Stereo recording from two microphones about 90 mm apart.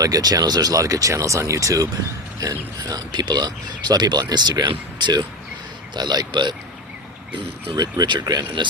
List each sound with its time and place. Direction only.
0.0 s speech: 45° right (ahead or behind)